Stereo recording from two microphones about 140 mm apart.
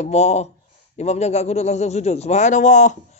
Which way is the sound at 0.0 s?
50° left (ahead or behind).